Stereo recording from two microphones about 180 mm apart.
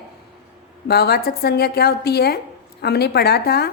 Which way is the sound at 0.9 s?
60° left (ahead or behind).